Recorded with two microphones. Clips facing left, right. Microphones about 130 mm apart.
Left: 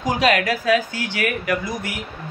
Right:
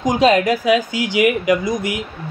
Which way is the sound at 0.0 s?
15° right (ahead or behind).